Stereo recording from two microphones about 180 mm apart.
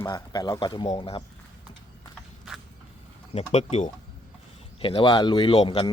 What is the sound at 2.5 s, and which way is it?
Creak, 5° right (ahead or behind).